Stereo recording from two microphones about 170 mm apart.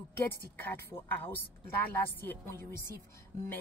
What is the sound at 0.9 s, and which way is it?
Speech, 10° left (ahead or behind).